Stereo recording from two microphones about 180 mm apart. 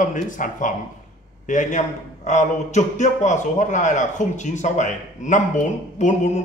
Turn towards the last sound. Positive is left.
turn(degrees=40)  # may be behind; listen again after turning